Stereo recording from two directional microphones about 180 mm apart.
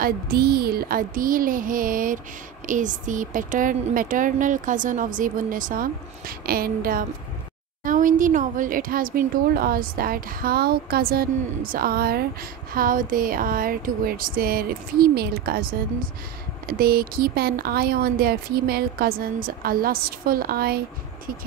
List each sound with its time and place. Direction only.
0.0 s speech: 60° right (ahead or behind)